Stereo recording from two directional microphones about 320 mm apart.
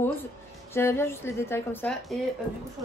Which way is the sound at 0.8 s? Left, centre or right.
Centre.